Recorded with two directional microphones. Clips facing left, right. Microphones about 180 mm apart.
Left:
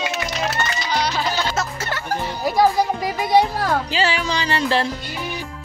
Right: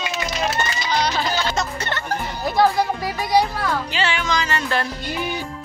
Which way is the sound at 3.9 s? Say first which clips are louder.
Left 1 dB; 35° left (ahead or behind).